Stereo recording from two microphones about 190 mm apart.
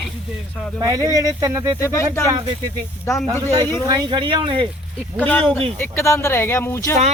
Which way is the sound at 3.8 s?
20° right (ahead or behind).